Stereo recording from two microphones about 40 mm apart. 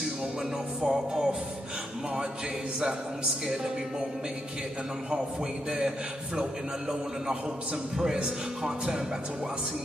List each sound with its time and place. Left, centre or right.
0.8 s a man's voice: centre
5.7 s a man's voice: centre
8.6 s a man's voice: centre